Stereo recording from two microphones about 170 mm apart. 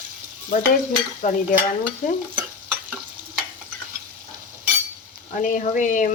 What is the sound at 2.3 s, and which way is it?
Stir, 10° right (ahead or behind).